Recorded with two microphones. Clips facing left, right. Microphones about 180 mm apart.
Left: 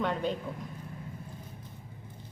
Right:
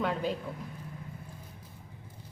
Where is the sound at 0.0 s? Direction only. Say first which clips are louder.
Even; 5° right (ahead or behind).